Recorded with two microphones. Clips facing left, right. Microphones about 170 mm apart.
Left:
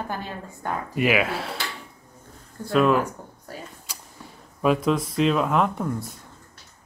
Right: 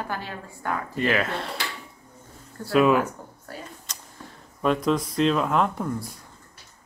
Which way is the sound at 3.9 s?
10° left (ahead or behind).